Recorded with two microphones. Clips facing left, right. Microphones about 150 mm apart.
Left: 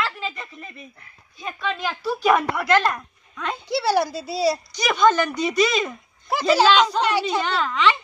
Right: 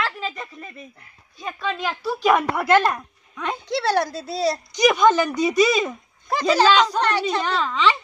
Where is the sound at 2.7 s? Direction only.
15° right (ahead or behind).